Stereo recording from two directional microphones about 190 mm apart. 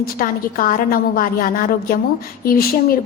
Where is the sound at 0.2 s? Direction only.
50° left (ahead or behind).